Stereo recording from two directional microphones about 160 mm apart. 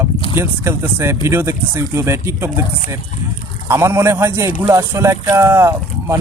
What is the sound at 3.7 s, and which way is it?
Speech, 15° right (ahead or behind).